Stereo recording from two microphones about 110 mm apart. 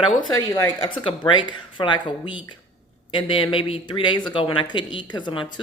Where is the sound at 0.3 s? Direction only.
35° left (ahead or behind).